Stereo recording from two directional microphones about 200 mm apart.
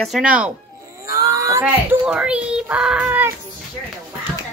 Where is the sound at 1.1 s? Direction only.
15° right (ahead or behind).